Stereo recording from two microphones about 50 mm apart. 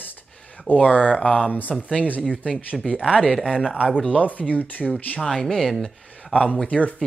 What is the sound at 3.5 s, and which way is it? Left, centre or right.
Speech, centre.